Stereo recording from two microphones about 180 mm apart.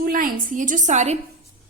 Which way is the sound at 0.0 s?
50° right (ahead or behind).